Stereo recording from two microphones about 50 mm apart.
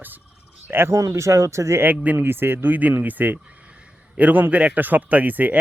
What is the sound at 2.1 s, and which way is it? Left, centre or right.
Speech, right.